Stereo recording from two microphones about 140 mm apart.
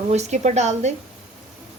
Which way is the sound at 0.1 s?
55° right (ahead or behind).